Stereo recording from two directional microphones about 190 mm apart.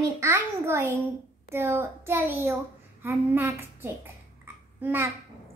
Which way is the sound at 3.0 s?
10° right (ahead or behind).